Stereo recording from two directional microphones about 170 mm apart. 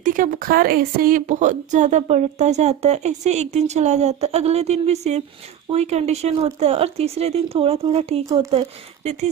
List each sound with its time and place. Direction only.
0.0 s speech: 50° right (ahead or behind); by 9.2 s 35° right (ahead or behind)